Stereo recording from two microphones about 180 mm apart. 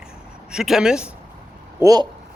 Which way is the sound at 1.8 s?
20° right (ahead or behind).